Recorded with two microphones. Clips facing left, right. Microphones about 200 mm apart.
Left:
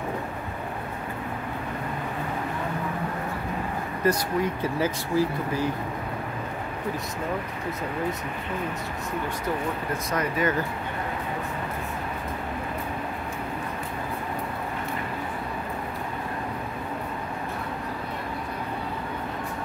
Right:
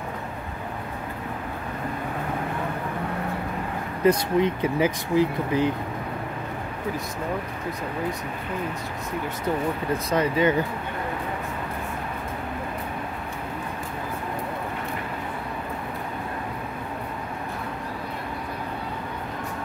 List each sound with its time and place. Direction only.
4.0 s speech: 20° right (ahead or behind)
10.1 s speech: 30° right (ahead or behind)